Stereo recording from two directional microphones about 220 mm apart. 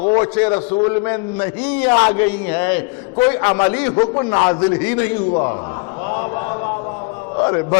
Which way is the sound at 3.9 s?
25° left (ahead or behind).